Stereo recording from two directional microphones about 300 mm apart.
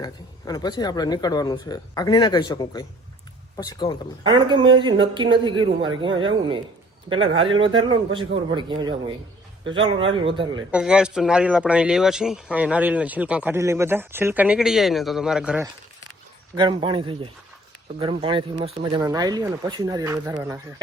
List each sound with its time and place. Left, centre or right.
0.0 s speech: centre
4.3 s speech: centre
10.7 s speech: centre
16.6 s speech: centre